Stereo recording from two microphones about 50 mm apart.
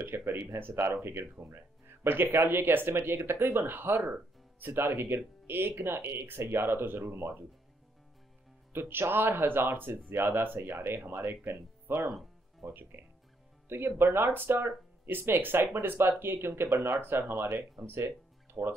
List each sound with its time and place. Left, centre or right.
0.0 s speech: right
8.7 s speech: right